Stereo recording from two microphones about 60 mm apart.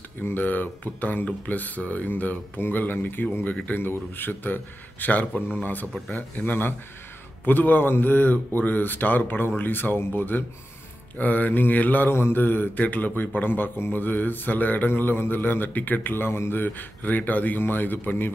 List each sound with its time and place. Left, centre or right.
0.2 s speech: left
12.1 s speech: left